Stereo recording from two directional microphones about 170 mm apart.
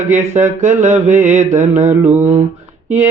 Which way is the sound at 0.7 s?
45° right (ahead or behind).